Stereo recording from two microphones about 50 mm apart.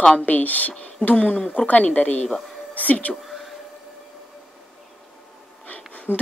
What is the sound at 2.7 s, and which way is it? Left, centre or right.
Speech, left.